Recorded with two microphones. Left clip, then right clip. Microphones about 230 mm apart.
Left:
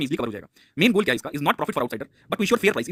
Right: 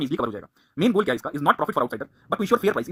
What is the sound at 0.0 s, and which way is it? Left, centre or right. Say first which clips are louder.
Speech: right 1 dB; left.